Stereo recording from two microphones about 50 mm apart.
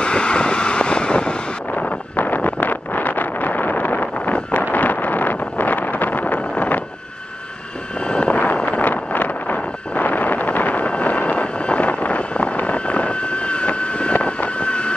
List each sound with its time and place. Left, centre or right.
0.0 s vehicle: centre
1.7 s wind noise: left
4.7 s vehicle: left
8.0 s vehicle: left